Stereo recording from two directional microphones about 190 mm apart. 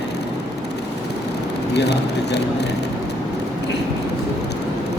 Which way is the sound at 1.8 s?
60° left (ahead or behind).